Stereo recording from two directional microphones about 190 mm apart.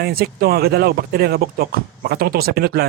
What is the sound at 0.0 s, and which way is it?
Speech, 55° right (ahead or behind).